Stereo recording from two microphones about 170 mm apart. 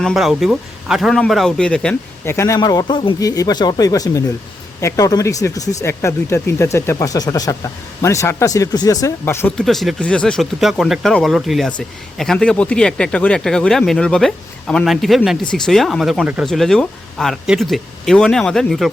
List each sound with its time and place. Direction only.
0.0 s a man's voice: centre (ahead or behind)
9.6 s speech: centre (ahead or behind)